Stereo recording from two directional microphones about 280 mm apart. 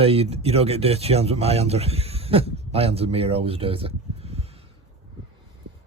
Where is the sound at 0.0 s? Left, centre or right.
Right.